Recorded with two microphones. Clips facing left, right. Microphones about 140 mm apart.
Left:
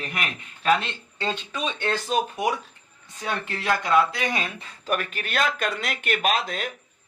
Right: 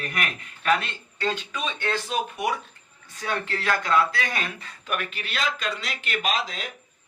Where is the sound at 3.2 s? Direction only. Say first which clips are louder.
Right 1 dB; 20° left (ahead or behind).